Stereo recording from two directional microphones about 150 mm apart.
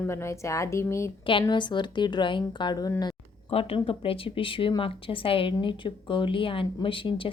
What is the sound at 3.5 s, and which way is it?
Speech, 40° left (ahead or behind).